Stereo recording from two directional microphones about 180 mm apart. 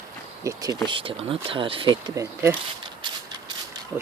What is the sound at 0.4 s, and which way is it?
Speech, 20° right (ahead or behind).